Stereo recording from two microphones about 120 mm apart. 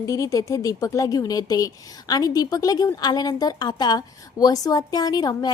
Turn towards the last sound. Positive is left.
turn(degrees=30)  # may be behind; listen again after turning